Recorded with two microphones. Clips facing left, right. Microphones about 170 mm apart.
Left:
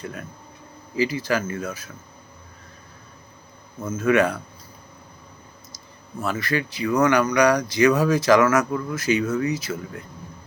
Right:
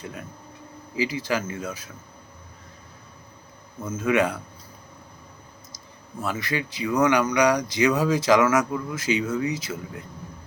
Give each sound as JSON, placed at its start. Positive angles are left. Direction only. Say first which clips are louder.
{"t": 0.0, "sound": "speech", "louder": "left 2 dB", "side_deg": -20}
{"t": 3.9, "sound": "speech", "louder": "left 3 dB", "side_deg": -20}
{"t": 6.2, "sound": "speech", "louder": "left 3 dB", "side_deg": -15}